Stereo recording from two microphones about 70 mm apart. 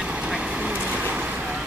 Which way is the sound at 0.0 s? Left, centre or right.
Centre.